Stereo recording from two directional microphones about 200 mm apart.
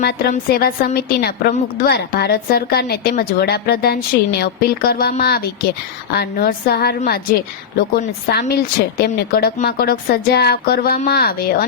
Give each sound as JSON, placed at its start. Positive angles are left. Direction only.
{"t": 0.0, "sound": "a woman's voice", "side_deg": 50}